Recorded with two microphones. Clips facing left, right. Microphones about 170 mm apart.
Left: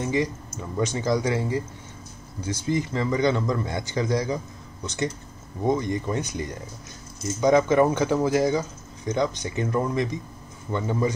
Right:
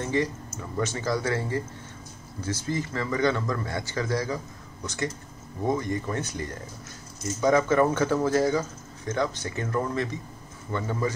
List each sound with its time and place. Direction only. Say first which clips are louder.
0.0 s a man's voice: left 2 dB; 15° left (ahead or behind)